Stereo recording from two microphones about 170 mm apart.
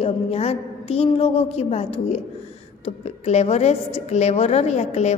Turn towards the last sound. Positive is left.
turn(degrees=40)  # may be behind; listen again after turning